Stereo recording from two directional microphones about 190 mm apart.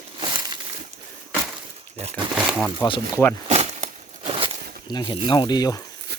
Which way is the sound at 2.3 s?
Centre (ahead or behind).